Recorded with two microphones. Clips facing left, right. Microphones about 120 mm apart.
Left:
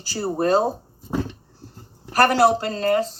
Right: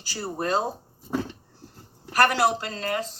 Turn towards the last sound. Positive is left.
turn(degrees=35)  # may be behind; listen again after turning